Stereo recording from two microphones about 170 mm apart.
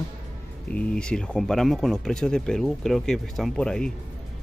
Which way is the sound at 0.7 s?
5° left (ahead or behind).